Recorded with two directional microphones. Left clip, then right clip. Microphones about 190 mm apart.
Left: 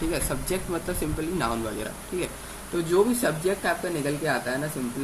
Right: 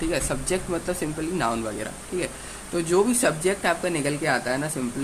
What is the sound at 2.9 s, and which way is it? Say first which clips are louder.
Speech: right 1 dB; 40° right (ahead or behind).